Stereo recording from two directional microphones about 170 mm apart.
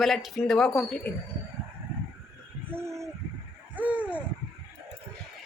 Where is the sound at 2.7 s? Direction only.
15° right (ahead or behind).